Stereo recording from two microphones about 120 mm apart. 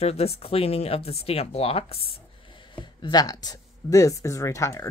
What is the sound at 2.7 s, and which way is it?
Speech, 40° left (ahead or behind).